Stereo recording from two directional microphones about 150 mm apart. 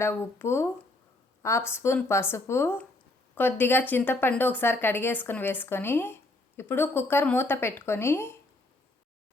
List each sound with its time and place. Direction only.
0.0 s speech: 15° left (ahead or behind)